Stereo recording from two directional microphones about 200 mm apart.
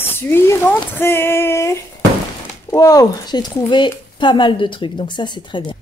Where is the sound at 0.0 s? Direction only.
10° left (ahead or behind).